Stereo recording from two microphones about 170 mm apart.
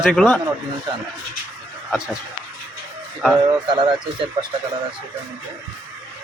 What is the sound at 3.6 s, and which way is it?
Speech, 30° right (ahead or behind).